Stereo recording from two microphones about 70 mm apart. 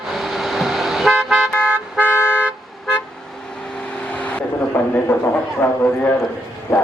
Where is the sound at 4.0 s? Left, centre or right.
Centre.